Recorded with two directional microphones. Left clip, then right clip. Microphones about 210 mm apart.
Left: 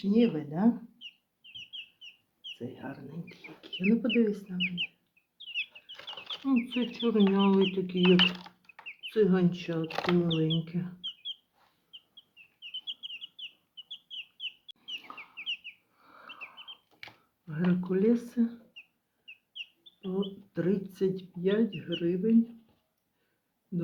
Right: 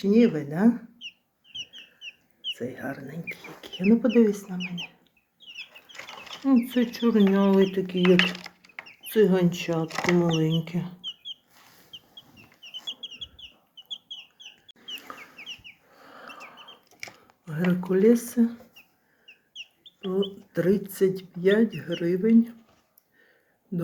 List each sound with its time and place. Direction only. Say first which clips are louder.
0.0 s speech: right 6 dB; centre (ahead or behind)
2.6 s speech: right 8 dB; 5° right (ahead or behind)
6.3 s chicken: right 7 dB; centre (ahead or behind)
6.7 s speech: right 5 dB; 5° right (ahead or behind)
10.4 s bird: right 4 dB; 10° right (ahead or behind)
15.6 s bird: left 1 dB; 30° left (ahead or behind)
16.1 s a sound: right 2 dB; centre (ahead or behind)
17.7 s speech: right 7 dB; centre (ahead or behind)
20.1 s speech: right 7 dB; 5° right (ahead or behind)